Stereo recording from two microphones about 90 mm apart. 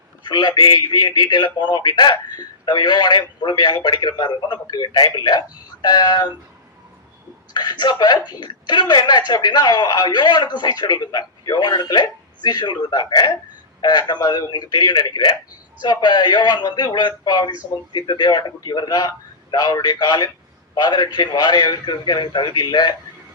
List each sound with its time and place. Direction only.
0.3 s speech: 55° left (ahead or behind)
7.5 s speech: 55° left (ahead or behind)
17.9 s speech: 60° left (ahead or behind)